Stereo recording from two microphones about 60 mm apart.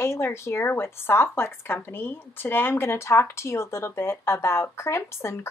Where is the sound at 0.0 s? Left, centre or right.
Left.